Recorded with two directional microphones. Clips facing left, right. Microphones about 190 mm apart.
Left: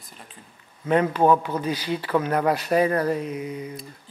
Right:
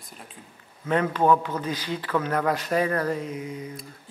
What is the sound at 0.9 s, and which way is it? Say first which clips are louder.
Speech: left 2 dB; 25° left (ahead or behind).